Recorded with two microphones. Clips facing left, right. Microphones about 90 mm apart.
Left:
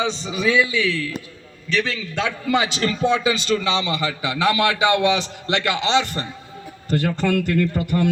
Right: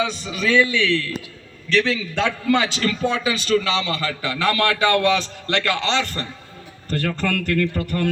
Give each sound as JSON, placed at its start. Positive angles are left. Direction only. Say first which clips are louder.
{"t": 0.0, "sound": "a man's voice", "louder": "left 1 dB", "side_deg": 25}
{"t": 2.5, "sound": "a man's voice", "louder": "left 1 dB", "side_deg": 20}